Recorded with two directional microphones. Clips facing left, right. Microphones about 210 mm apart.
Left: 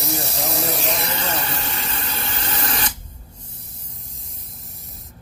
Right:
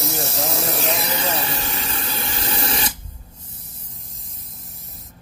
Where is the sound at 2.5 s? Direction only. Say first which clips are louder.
Right 2 dB; 30° right (ahead or behind).